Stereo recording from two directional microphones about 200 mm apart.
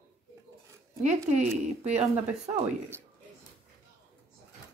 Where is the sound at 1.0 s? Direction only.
35° right (ahead or behind).